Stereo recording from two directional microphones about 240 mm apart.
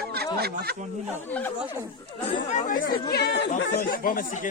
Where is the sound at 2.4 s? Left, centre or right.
Left.